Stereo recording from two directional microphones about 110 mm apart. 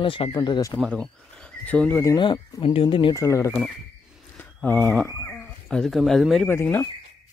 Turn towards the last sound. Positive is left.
turn(degrees=20)  # may be behind; listen again after turning